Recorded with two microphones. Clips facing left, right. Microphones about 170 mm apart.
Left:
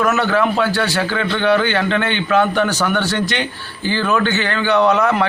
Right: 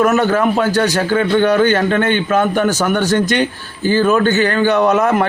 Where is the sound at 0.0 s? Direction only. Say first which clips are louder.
Right 3 dB; 45° right (ahead or behind).